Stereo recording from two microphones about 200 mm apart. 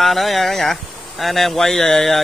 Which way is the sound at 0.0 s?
Centre (ahead or behind).